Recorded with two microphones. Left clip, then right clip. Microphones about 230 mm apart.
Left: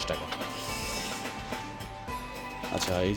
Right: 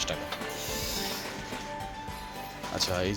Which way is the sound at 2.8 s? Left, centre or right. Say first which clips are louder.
Even; left.